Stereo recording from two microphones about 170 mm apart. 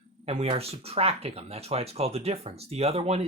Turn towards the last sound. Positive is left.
turn(degrees=-40)  # may be behind; listen again after turning